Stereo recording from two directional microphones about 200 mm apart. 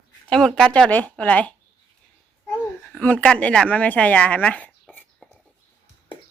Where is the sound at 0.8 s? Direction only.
5° left (ahead or behind).